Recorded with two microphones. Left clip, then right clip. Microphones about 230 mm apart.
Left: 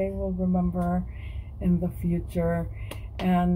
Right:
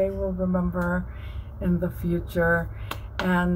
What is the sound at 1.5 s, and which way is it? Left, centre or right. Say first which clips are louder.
Speech: right 2 dB; right.